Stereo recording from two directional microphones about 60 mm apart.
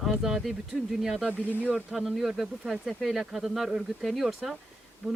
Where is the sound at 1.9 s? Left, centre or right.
Centre.